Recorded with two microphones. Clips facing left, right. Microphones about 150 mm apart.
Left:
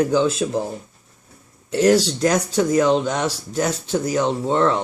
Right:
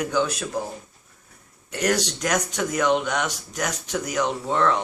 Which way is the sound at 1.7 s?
30° left (ahead or behind).